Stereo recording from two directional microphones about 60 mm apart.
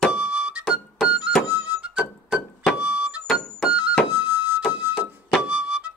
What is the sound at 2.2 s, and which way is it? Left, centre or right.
Music, centre.